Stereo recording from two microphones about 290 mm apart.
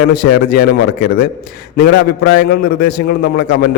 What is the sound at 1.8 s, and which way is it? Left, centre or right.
A man's voice, left.